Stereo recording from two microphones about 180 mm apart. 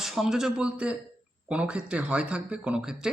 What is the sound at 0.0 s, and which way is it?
Speech, centre (ahead or behind).